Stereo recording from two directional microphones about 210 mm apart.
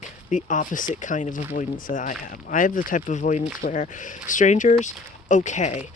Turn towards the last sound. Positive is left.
turn(degrees=35)  # may be behind; listen again after turning